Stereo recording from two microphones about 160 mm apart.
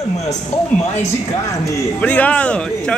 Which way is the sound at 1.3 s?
20° left (ahead or behind).